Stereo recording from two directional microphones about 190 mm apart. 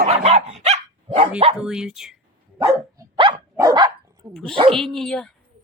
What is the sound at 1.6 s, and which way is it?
Speech, 5° right (ahead or behind).